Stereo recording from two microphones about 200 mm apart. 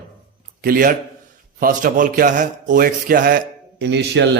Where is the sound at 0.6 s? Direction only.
45° right (ahead or behind).